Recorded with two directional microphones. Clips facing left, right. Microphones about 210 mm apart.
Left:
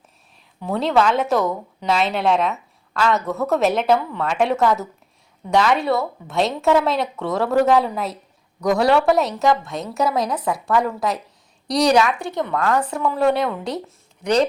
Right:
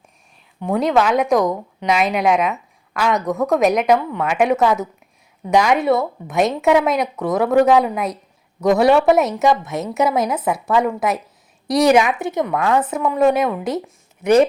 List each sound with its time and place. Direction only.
0.7 s a woman's voice: 10° right (ahead or behind)